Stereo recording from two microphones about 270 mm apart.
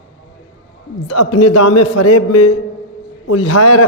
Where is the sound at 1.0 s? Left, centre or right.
Left.